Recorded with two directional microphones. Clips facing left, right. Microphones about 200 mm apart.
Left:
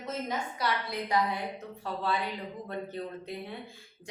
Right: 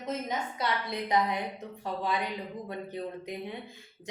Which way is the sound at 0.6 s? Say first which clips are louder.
Even; 20° right (ahead or behind).